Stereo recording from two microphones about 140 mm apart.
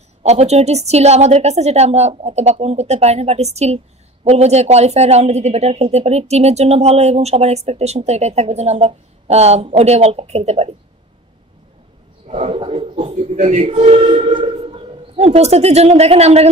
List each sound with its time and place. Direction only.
0.2 s a woman's voice: 50° right (ahead or behind)
12.3 s a woman's voice: 45° right (ahead or behind)
14.2 s music: 35° right (ahead or behind)
14.6 s speech: 45° right (ahead or behind)